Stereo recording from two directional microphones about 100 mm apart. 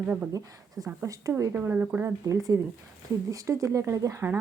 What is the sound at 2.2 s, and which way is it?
A woman's voice, 35° right (ahead or behind).